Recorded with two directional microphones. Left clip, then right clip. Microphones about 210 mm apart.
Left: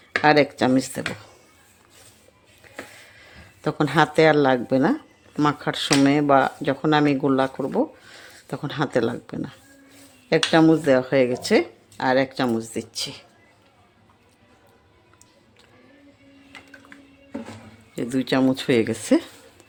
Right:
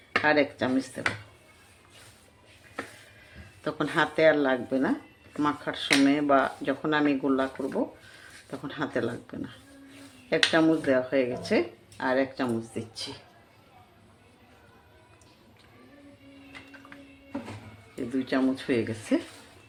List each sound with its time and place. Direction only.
0.2 s speech: 50° left (ahead or behind)
3.3 s speech: 45° left (ahead or behind)
17.9 s speech: 50° left (ahead or behind)